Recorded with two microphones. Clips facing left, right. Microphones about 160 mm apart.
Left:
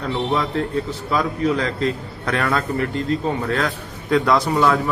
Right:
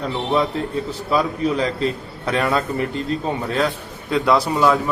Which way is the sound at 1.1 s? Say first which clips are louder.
Right 1 dB; 10° right (ahead or behind).